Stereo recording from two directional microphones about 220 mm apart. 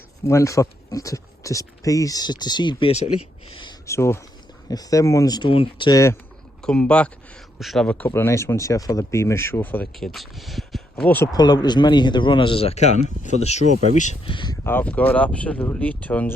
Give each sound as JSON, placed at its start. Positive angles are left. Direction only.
{"t": 0.3, "sound": "speech", "side_deg": 15}
{"t": 6.6, "sound": "speech", "side_deg": 5}